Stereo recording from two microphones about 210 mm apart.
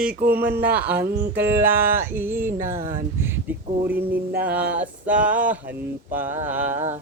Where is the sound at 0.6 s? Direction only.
10° right (ahead or behind).